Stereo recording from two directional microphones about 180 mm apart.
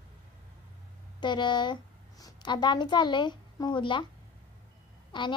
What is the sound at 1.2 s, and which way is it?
A woman's voice, 25° left (ahead or behind).